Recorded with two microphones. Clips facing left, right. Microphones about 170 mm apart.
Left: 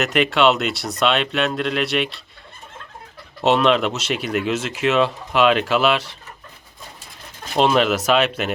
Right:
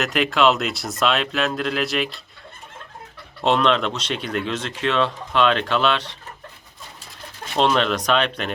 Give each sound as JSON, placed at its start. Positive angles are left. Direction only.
{"t": 0.0, "sound": "speech", "side_deg": 0}
{"t": 3.4, "sound": "speech", "side_deg": 5}
{"t": 7.5, "sound": "speech", "side_deg": 5}